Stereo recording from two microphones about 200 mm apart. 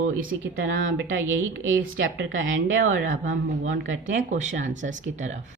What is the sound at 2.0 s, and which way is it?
Speech, 70° right (ahead or behind).